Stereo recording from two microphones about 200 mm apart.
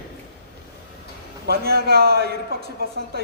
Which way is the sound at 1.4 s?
50° right (ahead or behind).